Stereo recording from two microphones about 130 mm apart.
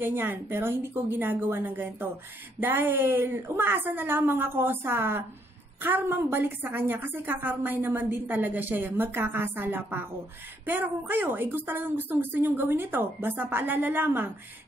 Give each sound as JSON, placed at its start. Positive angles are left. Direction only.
{"t": 0.0, "sound": "a woman's voice", "side_deg": -15}